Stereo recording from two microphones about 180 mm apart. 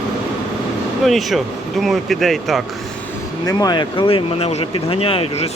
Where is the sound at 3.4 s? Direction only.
20° left (ahead or behind).